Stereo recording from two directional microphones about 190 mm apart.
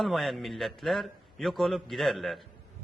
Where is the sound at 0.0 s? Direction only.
Centre (ahead or behind).